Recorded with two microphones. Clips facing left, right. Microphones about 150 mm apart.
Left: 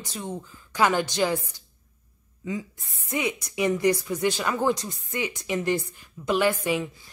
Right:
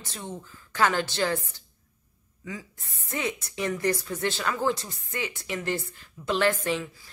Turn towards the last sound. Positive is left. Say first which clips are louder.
# left 3 dB
turn(degrees=20)  # may be behind; listen again after turning